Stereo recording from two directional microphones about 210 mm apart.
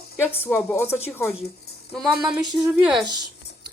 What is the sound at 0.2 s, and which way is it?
Speech, 10° left (ahead or behind).